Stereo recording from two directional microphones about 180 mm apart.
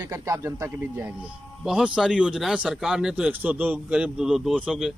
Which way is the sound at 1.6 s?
5° right (ahead or behind).